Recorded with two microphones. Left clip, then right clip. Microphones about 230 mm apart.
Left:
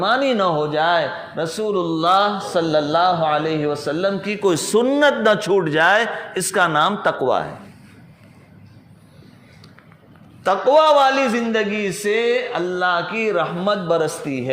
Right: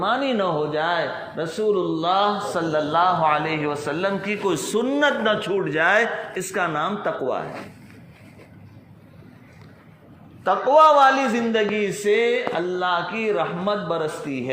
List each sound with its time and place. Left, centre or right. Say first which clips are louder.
0.0 s a man's voice: left 4 dB; left
10.4 s a man's voice: left 1 dB; left